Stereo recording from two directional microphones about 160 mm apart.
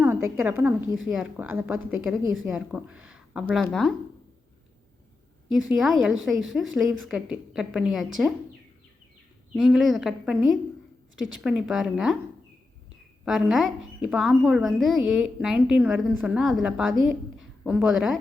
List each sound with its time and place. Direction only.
0.0 s a woman's voice: 15° right (ahead or behind)
1.0 s speech: 5° right (ahead or behind)
5.7 s speech: centre (ahead or behind)
9.6 s speech: centre (ahead or behind)
13.2 s a woman's voice: centre (ahead or behind)